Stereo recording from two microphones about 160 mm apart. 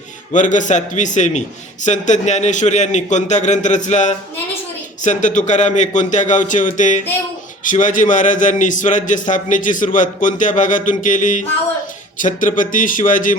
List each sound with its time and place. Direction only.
0.3 s a man's voice: 50° left (ahead or behind)